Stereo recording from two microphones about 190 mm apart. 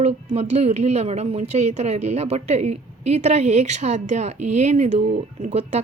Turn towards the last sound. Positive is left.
turn(degrees=-35)  # may be behind; listen again after turning